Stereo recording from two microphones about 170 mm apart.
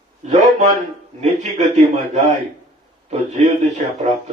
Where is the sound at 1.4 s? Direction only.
45° right (ahead or behind).